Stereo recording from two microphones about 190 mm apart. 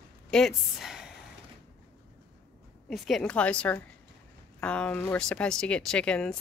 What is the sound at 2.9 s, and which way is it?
Speech, 5° left (ahead or behind).